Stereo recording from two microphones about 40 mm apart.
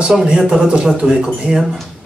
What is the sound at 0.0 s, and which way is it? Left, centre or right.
A man's voice, centre.